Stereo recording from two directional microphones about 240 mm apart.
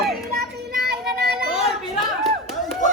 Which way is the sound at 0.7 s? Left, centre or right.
Right.